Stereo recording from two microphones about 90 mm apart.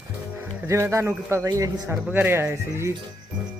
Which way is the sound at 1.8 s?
20° right (ahead or behind).